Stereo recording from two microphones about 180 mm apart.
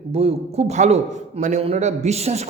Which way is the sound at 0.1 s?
35° right (ahead or behind).